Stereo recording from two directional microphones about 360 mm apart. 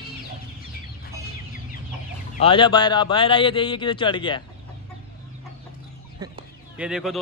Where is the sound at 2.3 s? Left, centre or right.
Centre.